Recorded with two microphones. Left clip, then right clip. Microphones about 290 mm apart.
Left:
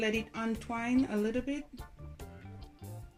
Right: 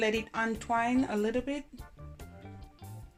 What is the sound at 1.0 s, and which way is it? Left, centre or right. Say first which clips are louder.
Speech: right 2 dB; right.